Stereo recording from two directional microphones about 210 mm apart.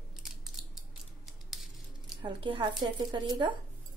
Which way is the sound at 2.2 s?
25° right (ahead or behind).